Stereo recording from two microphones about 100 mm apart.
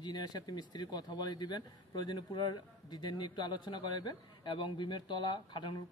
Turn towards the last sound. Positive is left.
turn(degrees=50)  # may be behind; listen again after turning